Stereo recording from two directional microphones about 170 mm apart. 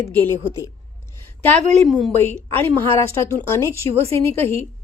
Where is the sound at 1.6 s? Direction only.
40° right (ahead or behind).